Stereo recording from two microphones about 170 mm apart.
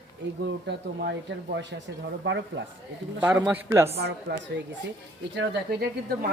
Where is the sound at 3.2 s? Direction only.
10° right (ahead or behind).